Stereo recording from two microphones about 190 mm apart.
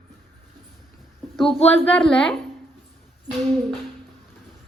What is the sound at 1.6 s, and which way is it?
Speech, 10° left (ahead or behind).